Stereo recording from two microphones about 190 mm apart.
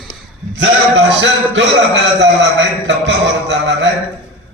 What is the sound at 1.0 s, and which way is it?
A man's voice, 75° right (ahead or behind).